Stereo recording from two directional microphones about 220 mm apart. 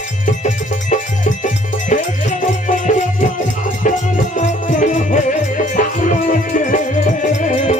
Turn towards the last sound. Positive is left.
turn(degrees=35)  # may be behind; listen again after turning